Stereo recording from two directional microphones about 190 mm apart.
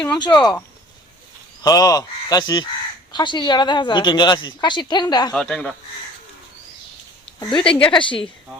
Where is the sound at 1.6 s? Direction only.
20° left (ahead or behind).